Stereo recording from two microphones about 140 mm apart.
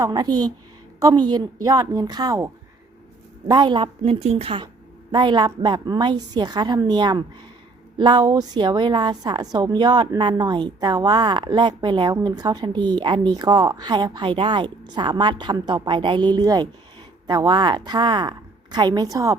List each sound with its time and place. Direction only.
0.0 s speech: 30° right (ahead or behind)
3.5 s a woman's voice: 35° right (ahead or behind)